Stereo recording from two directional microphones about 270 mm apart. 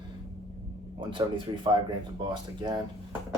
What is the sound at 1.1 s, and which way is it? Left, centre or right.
Speech, centre.